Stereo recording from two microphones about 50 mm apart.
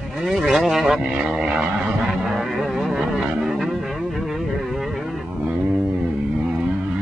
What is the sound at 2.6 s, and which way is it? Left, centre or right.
Music, centre.